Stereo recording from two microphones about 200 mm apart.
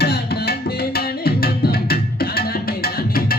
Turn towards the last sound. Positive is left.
turn(degrees=50)  # may be behind; listen again after turning